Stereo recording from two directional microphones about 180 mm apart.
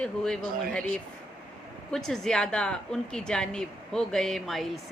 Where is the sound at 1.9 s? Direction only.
Centre (ahead or behind).